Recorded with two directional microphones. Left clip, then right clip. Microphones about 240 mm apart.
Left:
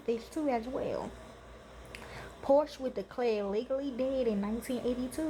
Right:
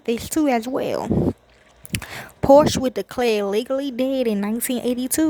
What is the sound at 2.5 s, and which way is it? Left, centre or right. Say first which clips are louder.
Speech: right 14 dB; right.